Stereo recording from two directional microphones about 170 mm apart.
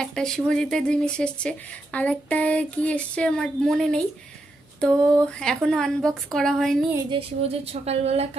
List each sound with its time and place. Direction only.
0.0 s speech: 5° left (ahead or behind)
7.1 s speech: 35° right (ahead or behind)